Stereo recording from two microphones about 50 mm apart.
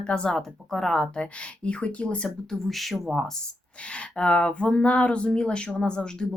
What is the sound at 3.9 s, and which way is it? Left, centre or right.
Speech, left.